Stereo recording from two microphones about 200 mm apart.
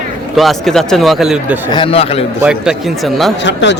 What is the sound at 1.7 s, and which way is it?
Speech, 25° left (ahead or behind).